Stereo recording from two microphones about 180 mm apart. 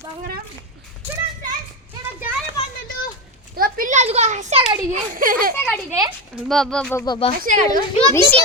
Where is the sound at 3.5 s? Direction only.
50° right (ahead or behind).